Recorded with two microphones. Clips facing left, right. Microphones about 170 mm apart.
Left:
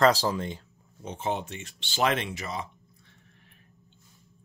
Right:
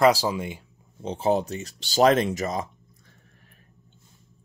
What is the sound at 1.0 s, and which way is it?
Speech, 35° right (ahead or behind).